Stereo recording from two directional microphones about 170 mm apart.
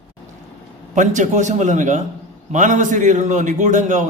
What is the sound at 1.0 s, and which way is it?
A man's voice, 45° right (ahead or behind).